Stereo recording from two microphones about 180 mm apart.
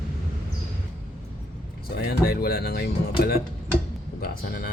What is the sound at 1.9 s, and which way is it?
Speech, 60° left (ahead or behind).